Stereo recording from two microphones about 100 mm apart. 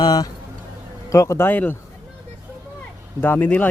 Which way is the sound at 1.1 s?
30° left (ahead or behind).